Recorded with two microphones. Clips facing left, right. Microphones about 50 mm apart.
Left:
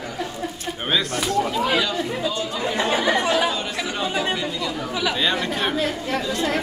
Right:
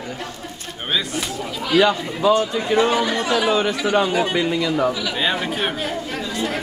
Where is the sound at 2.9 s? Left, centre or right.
Left.